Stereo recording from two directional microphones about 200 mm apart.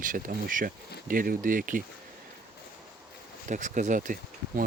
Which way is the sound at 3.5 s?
40° right (ahead or behind).